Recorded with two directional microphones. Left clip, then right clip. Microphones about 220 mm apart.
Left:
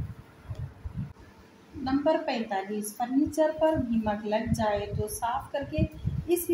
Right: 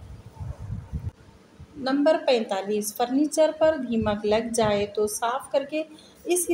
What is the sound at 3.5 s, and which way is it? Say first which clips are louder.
A woman's voice: right 4 dB; 45° right (ahead or behind).